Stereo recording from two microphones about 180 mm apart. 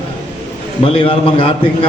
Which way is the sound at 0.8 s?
30° left (ahead or behind).